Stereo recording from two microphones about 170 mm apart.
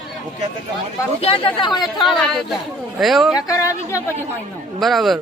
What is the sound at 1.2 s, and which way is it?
Speech, 35° left (ahead or behind).